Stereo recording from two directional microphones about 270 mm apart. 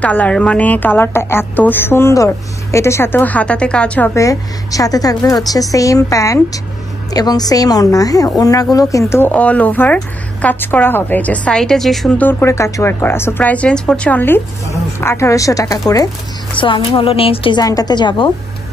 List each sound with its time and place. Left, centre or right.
0.0 s a woman's voice: centre